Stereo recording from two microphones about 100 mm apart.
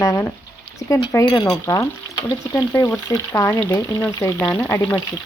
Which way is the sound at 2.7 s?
20° left (ahead or behind).